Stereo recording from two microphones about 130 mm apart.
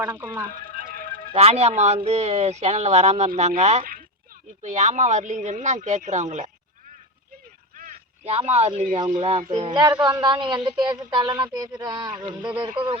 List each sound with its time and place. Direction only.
0.0 s speech: 15° right (ahead or behind)
0.5 s a sound: 90° right
1.3 s speech: 50° right (ahead or behind); by 4.0 s 75° right (ahead or behind)
4.6 s speech: 65° right (ahead or behind)
8.2 s speech: 50° right (ahead or behind)
9.5 s speech: 35° right (ahead or behind)